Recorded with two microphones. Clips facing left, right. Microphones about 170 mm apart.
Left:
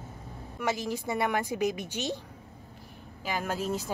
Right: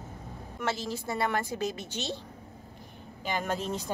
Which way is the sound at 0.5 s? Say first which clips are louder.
Left 2 dB; 15° left (ahead or behind).